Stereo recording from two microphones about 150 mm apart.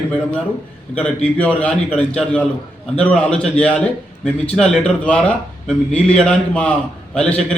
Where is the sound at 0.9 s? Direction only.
10° left (ahead or behind).